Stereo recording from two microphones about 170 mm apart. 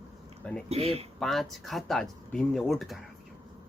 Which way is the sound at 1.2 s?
Centre (ahead or behind).